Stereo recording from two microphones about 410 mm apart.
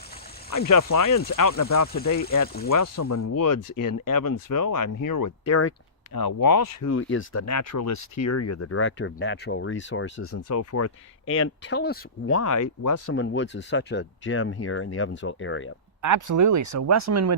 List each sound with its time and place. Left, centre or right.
0.7 s speech: left
5.5 s speech: left
6.1 s speech: left
6.9 s speech: left
16.0 s speech: right